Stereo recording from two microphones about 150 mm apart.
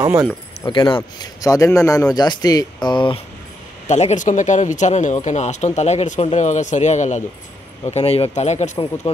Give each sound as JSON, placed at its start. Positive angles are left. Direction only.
{"t": 0.0, "sound": "speech", "side_deg": -20}
{"t": 0.7, "sound": "a man's voice", "side_deg": 35}
{"t": 3.8, "sound": "speech", "side_deg": 50}